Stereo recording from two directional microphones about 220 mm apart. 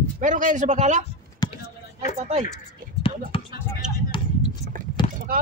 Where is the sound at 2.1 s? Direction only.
30° right (ahead or behind).